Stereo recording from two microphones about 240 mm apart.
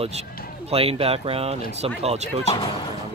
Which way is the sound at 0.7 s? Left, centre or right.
Right.